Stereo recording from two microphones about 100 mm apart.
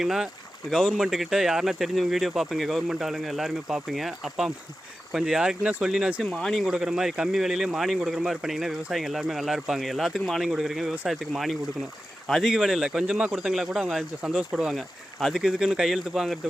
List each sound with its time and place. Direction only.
0.0 s speech: 5° right (ahead or behind)